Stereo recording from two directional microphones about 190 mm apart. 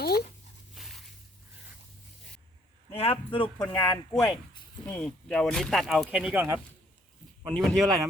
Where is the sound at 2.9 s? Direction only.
30° left (ahead or behind).